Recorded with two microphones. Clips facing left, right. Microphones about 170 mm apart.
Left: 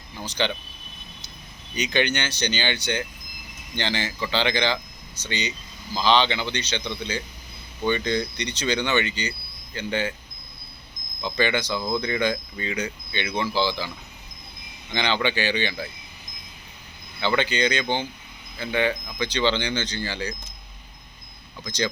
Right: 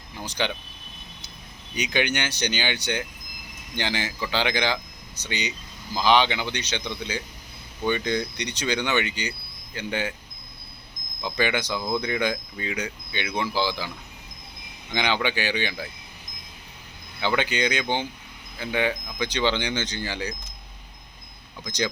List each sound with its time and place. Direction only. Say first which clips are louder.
0.2 s speech: left 2 dB; 10° right (ahead or behind)
1.7 s speech: left 1 dB; 10° right (ahead or behind)
11.2 s speech: left 1 dB; 10° right (ahead or behind)
14.9 s speech: left 1 dB; 10° right (ahead or behind)
17.2 s speech: left 1 dB; 10° right (ahead or behind)